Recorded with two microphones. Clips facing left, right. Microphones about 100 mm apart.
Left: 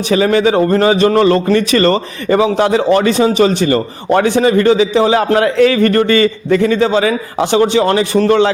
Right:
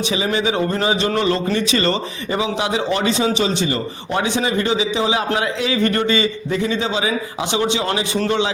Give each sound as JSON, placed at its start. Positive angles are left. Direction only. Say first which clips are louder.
{"t": 0.1, "sound": "speech", "louder": "left 11 dB", "side_deg": 55}